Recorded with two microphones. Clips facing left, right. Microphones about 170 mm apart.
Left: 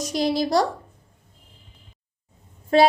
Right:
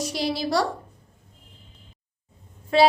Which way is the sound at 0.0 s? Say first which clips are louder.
Left 4 dB; 45° left (ahead or behind).